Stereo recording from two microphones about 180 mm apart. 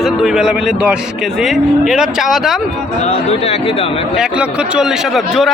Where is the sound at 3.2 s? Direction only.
35° left (ahead or behind).